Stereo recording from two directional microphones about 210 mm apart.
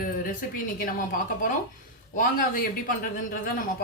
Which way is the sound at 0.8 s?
40° left (ahead or behind).